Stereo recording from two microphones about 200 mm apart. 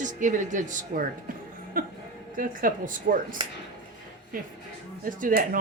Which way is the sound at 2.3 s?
40° right (ahead or behind).